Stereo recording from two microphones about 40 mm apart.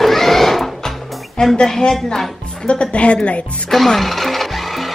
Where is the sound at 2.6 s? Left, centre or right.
Left.